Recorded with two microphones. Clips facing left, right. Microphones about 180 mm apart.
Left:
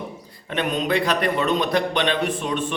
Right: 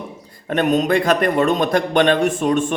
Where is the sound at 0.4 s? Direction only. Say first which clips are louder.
Right 7 dB; 45° right (ahead or behind).